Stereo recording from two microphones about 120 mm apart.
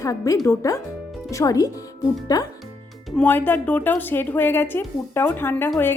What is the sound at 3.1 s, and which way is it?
A woman's voice, 15° left (ahead or behind).